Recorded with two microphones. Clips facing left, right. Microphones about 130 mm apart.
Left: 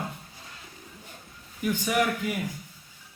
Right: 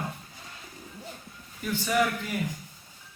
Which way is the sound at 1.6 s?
15° left (ahead or behind).